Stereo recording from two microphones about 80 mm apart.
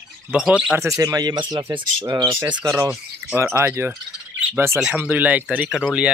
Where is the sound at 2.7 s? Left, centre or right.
Right.